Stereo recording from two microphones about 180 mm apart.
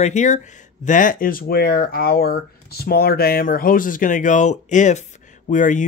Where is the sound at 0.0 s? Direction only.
40° left (ahead or behind).